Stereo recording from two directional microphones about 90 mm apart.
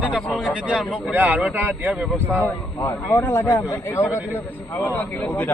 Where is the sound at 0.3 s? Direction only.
15° left (ahead or behind).